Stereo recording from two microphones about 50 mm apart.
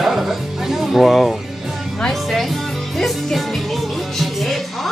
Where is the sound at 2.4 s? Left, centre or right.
Centre.